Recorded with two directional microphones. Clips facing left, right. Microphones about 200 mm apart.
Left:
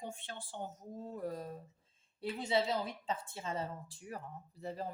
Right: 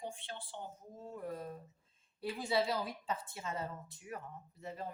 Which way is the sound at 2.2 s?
25° left (ahead or behind).